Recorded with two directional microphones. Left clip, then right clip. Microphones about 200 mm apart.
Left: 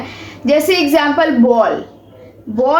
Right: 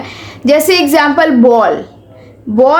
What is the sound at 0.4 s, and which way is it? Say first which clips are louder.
A woman's voice: right 4 dB; 55° right (ahead or behind).